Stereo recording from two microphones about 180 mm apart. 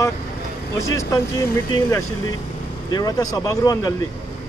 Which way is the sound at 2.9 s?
20° left (ahead or behind).